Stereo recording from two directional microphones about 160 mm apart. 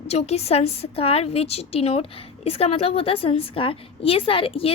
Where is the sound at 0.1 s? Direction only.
40° left (ahead or behind).